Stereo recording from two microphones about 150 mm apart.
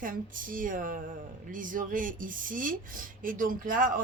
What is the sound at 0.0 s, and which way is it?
A woman's voice, 65° right (ahead or behind).